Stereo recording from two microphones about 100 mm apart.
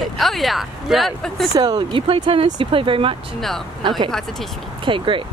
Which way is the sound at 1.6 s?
45° right (ahead or behind).